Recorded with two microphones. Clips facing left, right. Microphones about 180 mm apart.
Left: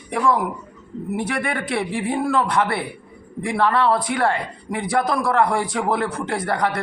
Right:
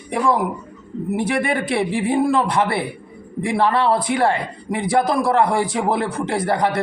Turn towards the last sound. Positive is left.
turn(degrees=-25)  # may be behind; listen again after turning